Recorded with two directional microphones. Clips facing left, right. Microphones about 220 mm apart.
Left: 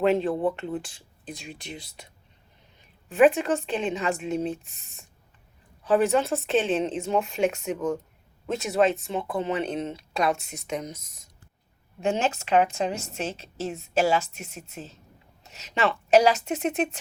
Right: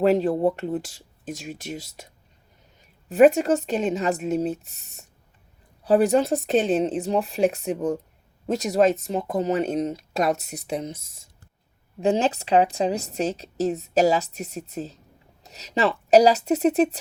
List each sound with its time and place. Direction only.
0.0 s a woman's voice: 40° right (ahead or behind)